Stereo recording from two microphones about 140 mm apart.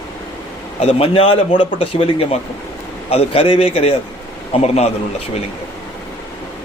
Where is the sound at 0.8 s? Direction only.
40° left (ahead or behind).